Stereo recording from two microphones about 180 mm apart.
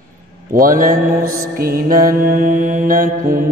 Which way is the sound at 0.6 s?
50° right (ahead or behind).